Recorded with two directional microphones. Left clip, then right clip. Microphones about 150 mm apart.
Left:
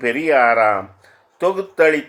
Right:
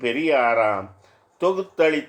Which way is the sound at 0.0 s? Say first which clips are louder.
Left 5 dB; 40° left (ahead or behind).